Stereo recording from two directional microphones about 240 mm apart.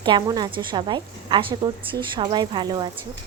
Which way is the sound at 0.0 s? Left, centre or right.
Centre.